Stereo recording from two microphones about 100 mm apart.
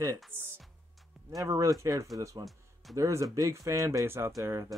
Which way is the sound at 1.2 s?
35° right (ahead or behind).